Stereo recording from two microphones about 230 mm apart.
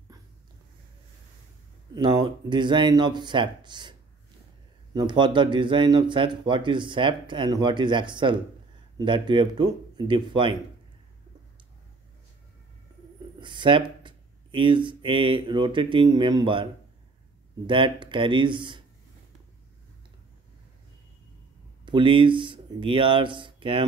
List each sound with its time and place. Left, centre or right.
2.0 s a man's voice: centre
4.9 s a man's voice: centre
13.4 s speech: right
17.6 s a man's voice: right
21.8 s speech: right